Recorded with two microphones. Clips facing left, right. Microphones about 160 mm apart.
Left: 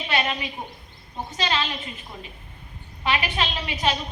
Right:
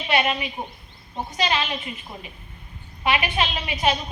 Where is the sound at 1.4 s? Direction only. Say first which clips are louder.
Right 2 dB; 15° right (ahead or behind).